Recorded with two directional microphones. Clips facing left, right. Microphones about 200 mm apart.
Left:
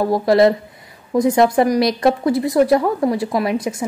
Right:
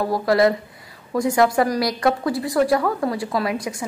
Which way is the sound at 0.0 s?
25° left (ahead or behind).